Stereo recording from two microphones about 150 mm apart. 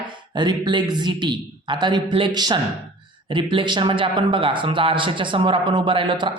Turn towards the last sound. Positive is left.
turn(degrees=-35)  # may be behind; listen again after turning